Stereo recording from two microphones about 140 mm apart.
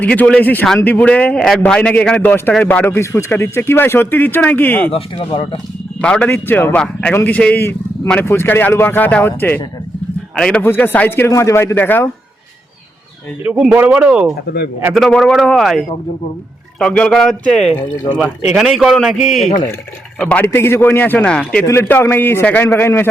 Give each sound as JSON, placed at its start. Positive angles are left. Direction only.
{"t": 0.0, "sound": "a man's voice", "side_deg": 10}
{"t": 4.9, "sound": "speech", "side_deg": 40}
{"t": 6.0, "sound": "a man's voice", "side_deg": 10}
{"t": 13.4, "sound": "a man's voice", "side_deg": -5}
{"t": 17.9, "sound": "speech", "side_deg": 30}
{"t": 18.2, "sound": "a man's voice", "side_deg": -5}
{"t": 20.1, "sound": "a man's voice", "side_deg": 10}